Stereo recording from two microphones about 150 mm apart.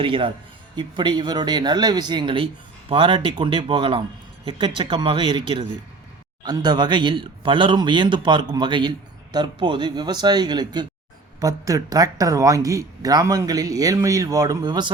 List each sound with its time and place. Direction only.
0.0 s speech: 35° right (ahead or behind)